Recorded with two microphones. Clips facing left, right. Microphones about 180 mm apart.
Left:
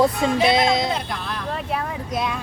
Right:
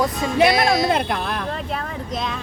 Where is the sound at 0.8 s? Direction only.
60° right (ahead or behind).